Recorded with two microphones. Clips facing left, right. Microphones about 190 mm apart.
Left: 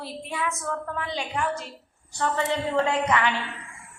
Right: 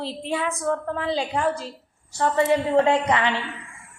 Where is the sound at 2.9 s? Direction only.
30° right (ahead or behind).